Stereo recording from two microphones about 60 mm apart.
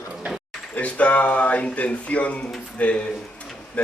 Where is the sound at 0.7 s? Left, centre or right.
Left.